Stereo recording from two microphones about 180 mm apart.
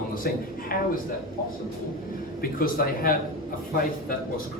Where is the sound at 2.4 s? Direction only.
55° left (ahead or behind).